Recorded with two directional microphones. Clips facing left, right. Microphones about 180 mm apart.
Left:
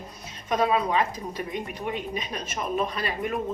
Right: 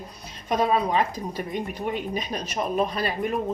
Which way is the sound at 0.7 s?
40° right (ahead or behind).